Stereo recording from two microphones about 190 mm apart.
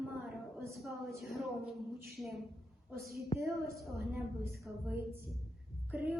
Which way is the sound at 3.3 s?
30° left (ahead or behind).